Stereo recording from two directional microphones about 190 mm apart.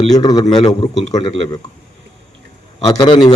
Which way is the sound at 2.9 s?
20° left (ahead or behind).